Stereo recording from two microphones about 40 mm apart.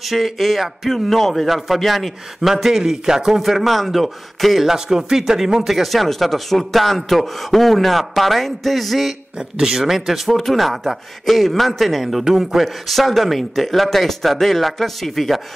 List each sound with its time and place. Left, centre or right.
0.0 s speech: centre
2.5 s speech: centre
4.6 s speech: centre
5.8 s speech: centre
9.4 s speech: centre